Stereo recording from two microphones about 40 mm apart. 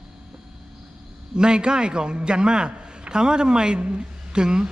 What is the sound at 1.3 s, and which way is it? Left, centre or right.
A man's voice, right.